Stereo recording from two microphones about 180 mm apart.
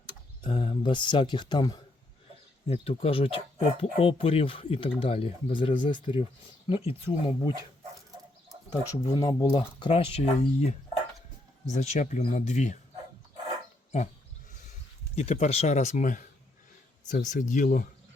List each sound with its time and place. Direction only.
0.4 s speech: 30° left (ahead or behind)
9.1 s speech: 25° left (ahead or behind); by 12.7 s 40° left (ahead or behind)
15.1 s speech: 35° left (ahead or behind)